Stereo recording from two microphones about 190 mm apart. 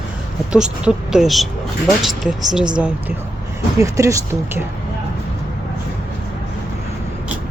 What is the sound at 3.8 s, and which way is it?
Speech, 15° right (ahead or behind).